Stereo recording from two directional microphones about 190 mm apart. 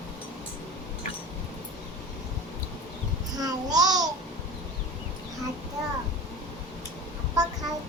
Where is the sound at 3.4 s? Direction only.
20° right (ahead or behind).